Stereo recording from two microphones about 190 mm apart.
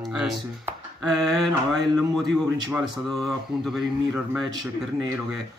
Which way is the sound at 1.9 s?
Centre (ahead or behind).